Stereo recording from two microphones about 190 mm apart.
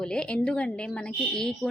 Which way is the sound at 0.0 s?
5° left (ahead or behind).